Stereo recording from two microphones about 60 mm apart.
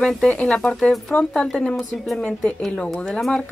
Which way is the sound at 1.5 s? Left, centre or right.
Left.